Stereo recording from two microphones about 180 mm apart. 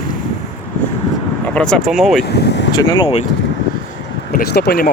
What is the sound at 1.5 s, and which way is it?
Speech, 5° left (ahead or behind).